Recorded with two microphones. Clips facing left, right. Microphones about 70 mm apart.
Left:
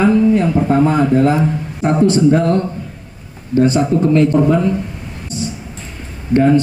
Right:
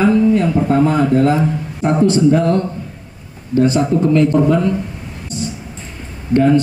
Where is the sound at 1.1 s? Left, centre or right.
Centre.